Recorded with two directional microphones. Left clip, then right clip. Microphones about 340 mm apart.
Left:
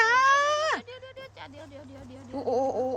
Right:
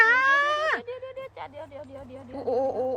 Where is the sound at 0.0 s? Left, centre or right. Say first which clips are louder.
Right 1 dB; centre.